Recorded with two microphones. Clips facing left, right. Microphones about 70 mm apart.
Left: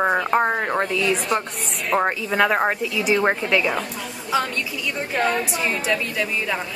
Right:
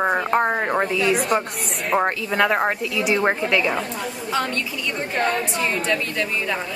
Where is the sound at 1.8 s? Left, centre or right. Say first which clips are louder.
Even; centre.